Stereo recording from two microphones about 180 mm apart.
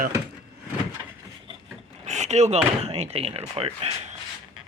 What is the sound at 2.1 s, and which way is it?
Speech, 40° right (ahead or behind).